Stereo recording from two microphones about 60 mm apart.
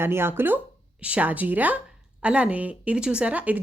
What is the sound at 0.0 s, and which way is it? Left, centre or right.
Speech, right.